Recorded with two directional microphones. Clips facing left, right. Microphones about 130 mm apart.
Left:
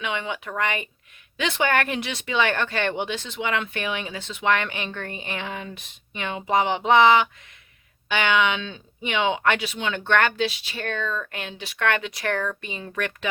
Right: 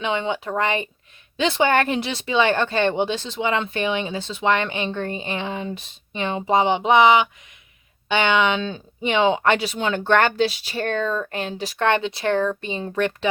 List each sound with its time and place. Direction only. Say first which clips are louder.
0.0 s speech: right 5 dB; 30° right (ahead or behind)